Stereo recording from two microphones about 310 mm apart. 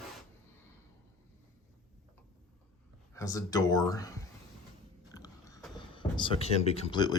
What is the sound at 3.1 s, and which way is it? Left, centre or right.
Speech, centre.